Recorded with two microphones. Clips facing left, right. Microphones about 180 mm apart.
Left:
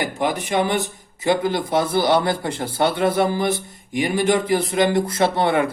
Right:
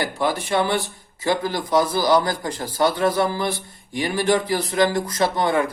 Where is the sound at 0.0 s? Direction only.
20° left (ahead or behind).